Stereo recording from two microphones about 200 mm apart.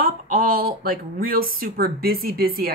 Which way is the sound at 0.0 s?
45° right (ahead or behind).